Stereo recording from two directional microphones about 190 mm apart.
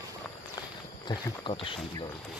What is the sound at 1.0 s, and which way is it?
Speech, 25° left (ahead or behind).